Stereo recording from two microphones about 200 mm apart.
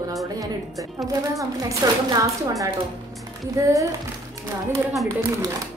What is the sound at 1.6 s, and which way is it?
Speech, 20° right (ahead or behind).